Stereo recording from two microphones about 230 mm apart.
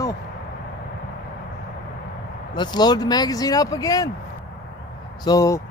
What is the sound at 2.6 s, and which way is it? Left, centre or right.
Speech, centre.